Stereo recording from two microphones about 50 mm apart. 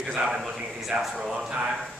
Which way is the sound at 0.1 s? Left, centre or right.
Centre.